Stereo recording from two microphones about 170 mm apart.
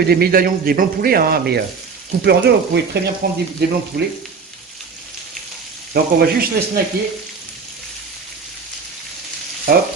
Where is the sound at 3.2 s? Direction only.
65° right (ahead or behind).